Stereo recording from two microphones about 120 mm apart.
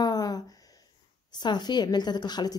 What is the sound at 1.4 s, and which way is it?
A woman's voice, 35° left (ahead or behind).